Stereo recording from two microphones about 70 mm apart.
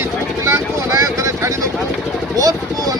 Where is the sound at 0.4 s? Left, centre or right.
Right.